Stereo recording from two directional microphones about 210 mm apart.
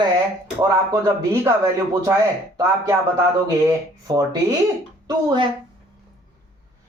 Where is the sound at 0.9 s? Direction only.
15° right (ahead or behind).